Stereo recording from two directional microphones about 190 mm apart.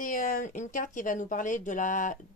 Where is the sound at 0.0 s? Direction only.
45° left (ahead or behind).